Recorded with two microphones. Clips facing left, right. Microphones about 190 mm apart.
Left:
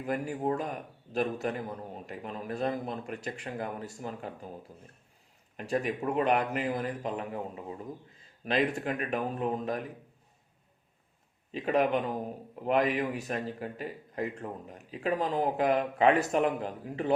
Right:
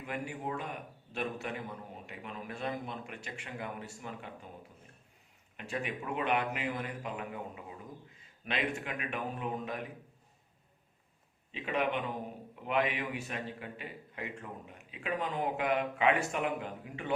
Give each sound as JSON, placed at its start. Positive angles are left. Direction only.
{"t": 0.0, "sound": "a man's voice", "side_deg": 40}
{"t": 5.5, "sound": "a man's voice", "side_deg": 40}
{"t": 11.5, "sound": "a man's voice", "side_deg": 40}